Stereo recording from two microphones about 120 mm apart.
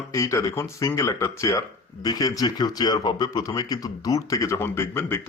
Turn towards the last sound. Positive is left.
turn(degrees=20)  # may be behind; listen again after turning